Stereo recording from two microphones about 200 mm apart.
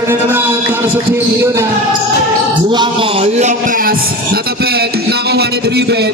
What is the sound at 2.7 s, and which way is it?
A man's voice, 25° right (ahead or behind).